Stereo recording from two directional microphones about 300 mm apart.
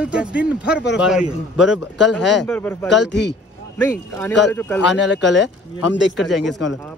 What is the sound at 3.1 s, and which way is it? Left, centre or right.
Speech, left.